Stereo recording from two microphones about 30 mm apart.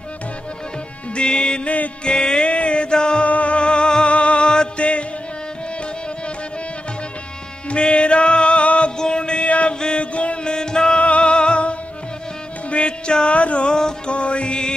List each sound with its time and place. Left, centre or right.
1.1 s music: left
2.0 s mantra: left
3.3 s music: left
7.7 s music: left
8.9 s mantra: left
9.5 s chant: left
9.8 s music: left
10.1 s music: left
10.4 s music: left
11.0 s music: left
13.4 s music: left
13.7 s music: left
14.0 s music: left